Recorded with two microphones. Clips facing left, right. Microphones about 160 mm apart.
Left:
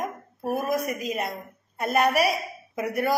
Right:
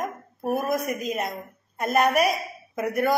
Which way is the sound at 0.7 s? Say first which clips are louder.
Right 1 dB; 50° right (ahead or behind).